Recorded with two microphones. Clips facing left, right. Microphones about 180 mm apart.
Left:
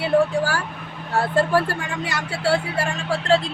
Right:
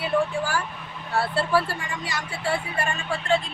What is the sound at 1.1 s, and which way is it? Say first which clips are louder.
Speech: left 4 dB; 45° left (ahead or behind).